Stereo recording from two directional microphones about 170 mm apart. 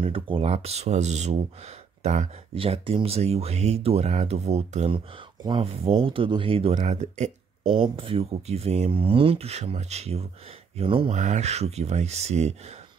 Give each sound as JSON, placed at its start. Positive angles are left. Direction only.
{"t": 0.0, "sound": "speech", "side_deg": -35}
{"t": 7.7, "sound": "speech", "side_deg": -30}
{"t": 11.1, "sound": "speech", "side_deg": -45}